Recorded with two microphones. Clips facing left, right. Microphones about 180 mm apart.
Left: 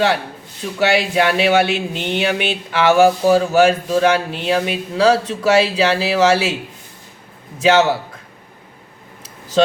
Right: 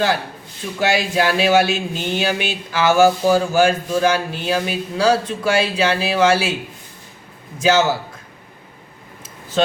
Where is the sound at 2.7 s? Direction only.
65° left (ahead or behind).